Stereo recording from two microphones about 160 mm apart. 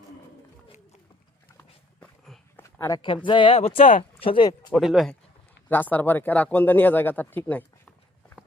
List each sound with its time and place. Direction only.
2.6 s a sound: 15° left (ahead or behind)
3.2 s speech: 30° left (ahead or behind)
4.7 s speech: centre (ahead or behind)
5.6 s speech: 10° left (ahead or behind)